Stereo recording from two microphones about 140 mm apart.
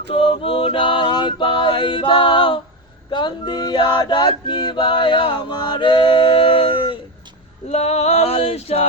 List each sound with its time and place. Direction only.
0.1 s male singing: 40° left (ahead or behind)
7.7 s male singing: 50° left (ahead or behind)